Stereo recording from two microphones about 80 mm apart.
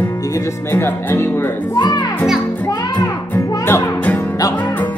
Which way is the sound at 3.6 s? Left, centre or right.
Left.